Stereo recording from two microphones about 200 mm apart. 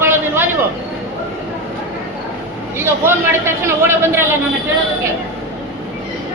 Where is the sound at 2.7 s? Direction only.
10° right (ahead or behind).